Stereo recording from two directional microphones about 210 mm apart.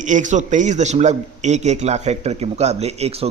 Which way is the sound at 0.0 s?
35° right (ahead or behind).